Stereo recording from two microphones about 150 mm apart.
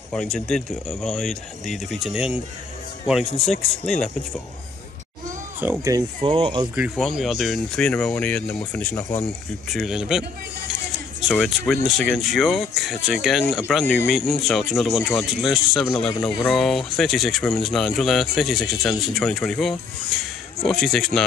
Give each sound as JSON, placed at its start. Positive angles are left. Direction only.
{"t": 0.1, "sound": "speech", "side_deg": 5}
{"t": 5.6, "sound": "speech", "side_deg": -20}
{"t": 6.7, "sound": "speech", "side_deg": -5}
{"t": 9.7, "sound": "speech", "side_deg": 0}
{"t": 11.2, "sound": "speech", "side_deg": 0}